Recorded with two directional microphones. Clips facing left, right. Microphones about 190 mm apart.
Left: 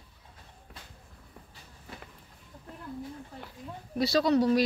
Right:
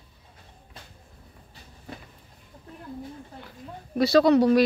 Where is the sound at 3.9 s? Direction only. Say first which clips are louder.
Right 6 dB; 60° right (ahead or behind).